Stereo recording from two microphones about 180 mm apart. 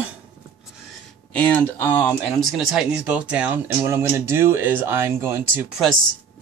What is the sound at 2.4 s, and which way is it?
Speech, centre (ahead or behind).